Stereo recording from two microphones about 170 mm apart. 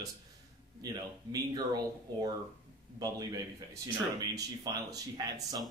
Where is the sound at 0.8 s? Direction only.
20° right (ahead or behind).